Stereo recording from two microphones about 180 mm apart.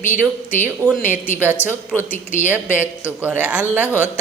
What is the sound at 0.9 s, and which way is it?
Speech, 10° right (ahead or behind).